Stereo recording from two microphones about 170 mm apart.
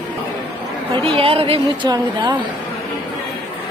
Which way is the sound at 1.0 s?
35° right (ahead or behind).